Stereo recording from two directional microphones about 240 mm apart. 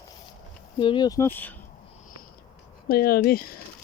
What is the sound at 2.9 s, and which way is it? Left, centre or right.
Speech, left.